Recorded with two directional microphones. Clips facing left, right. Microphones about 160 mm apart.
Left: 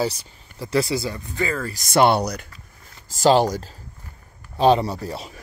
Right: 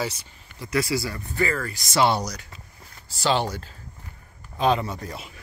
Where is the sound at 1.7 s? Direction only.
50° left (ahead or behind).